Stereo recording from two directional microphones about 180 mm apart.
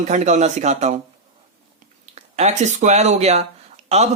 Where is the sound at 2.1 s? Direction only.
40° right (ahead or behind).